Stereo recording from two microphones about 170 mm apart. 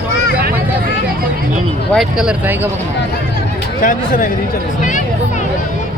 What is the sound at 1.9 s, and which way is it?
Speech, 5° right (ahead or behind).